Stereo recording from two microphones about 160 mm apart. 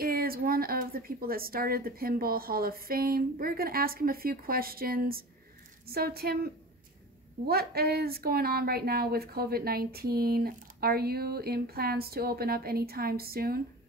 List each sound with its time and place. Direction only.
0.0 s a woman's voice: 70° right (ahead or behind)